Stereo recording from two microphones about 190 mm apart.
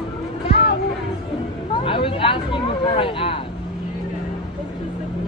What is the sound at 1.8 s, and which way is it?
Speech, 30° left (ahead or behind).